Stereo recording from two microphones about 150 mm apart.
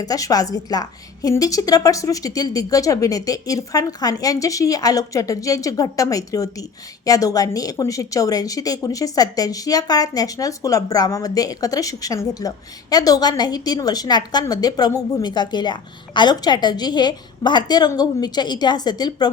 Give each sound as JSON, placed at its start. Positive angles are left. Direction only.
{"t": 0.0, "sound": "a woman's voice", "side_deg": 25}